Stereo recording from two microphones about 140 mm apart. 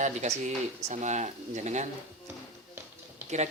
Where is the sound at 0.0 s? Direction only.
60° right (ahead or behind).